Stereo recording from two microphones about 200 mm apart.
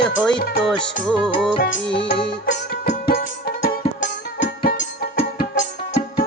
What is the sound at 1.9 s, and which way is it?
Music, 25° left (ahead or behind).